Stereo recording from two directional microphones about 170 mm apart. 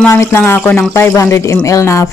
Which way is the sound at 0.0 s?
15° left (ahead or behind).